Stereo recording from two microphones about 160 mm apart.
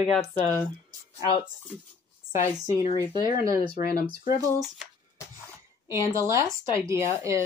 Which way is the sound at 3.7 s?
70° left (ahead or behind).